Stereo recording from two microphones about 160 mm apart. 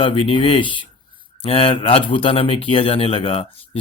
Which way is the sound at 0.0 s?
35° left (ahead or behind).